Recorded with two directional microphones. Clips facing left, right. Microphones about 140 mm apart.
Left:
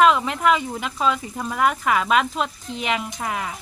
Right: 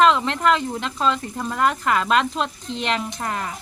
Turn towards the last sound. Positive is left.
turn(degrees=5)  # may be behind; listen again after turning